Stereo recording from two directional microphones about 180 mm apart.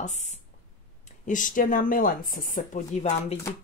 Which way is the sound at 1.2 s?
45° left (ahead or behind).